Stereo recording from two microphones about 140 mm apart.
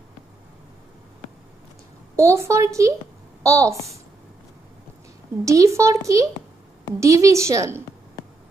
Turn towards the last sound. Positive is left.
turn(degrees=-20)  # may be behind; listen again after turning